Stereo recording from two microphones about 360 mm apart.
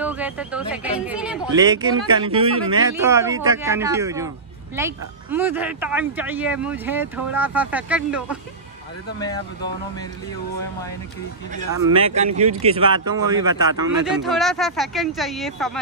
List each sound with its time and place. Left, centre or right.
0.0 s speech: centre
11.5 s speech: centre